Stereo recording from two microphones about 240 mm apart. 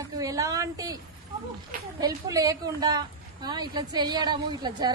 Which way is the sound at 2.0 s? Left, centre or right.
Centre.